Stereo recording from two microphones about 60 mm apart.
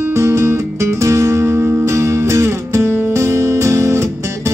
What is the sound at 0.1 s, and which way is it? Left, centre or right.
Music, right.